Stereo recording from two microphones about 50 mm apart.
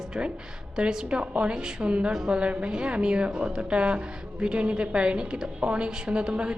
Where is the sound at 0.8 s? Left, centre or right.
Centre.